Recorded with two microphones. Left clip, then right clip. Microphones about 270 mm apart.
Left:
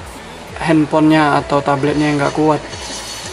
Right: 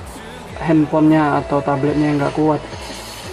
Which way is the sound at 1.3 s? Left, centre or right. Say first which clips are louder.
Left 3 dB; right.